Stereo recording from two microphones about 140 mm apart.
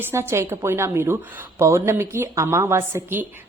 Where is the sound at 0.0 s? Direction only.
15° right (ahead or behind).